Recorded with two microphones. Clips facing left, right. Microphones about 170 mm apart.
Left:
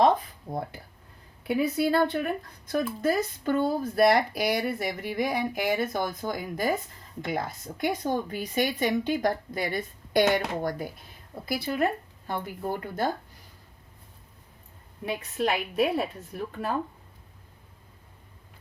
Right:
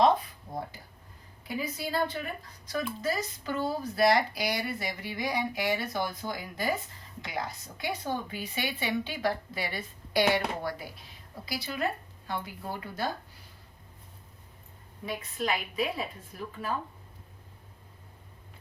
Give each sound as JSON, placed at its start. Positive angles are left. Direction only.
{"t": 0.5, "sound": "speech", "side_deg": 60}
{"t": 15.0, "sound": "speech", "side_deg": 65}